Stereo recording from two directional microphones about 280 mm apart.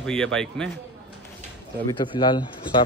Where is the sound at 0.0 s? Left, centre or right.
Centre.